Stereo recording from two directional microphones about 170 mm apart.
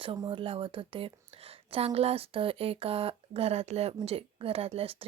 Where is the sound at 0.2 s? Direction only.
30° right (ahead or behind).